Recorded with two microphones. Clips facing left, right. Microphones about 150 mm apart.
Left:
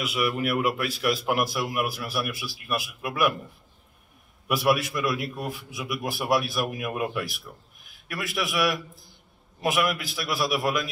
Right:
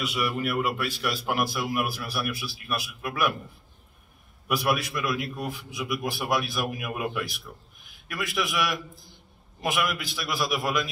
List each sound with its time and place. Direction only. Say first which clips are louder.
0.0 s a man's voice: left 2 dB; centre (ahead or behind)
4.5 s a man's voice: left 3 dB; centre (ahead or behind)